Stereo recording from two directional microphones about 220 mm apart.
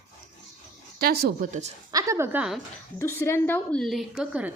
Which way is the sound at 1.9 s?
15° right (ahead or behind).